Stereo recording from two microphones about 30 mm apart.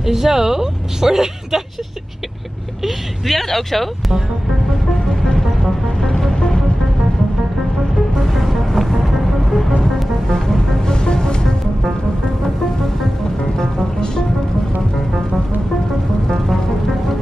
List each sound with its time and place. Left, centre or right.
0.0 s a woman's voice: centre
2.8 s speech: centre
4.9 s music: centre
5.9 s music: centre
6.3 s music: left
8.2 s music: centre
10.9 s music: left
13.6 s music: centre